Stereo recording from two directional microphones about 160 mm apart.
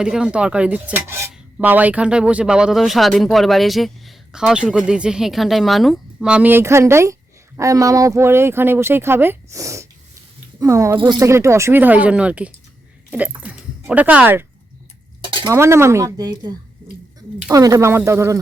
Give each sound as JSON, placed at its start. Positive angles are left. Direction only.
{"t": 0.0, "sound": "speech", "side_deg": -5}
{"t": 10.9, "sound": "speech", "side_deg": -30}
{"t": 11.2, "sound": "speech", "side_deg": -15}
{"t": 15.4, "sound": "speech", "side_deg": -15}